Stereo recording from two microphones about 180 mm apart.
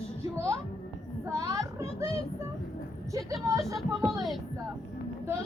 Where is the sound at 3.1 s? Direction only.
20° right (ahead or behind).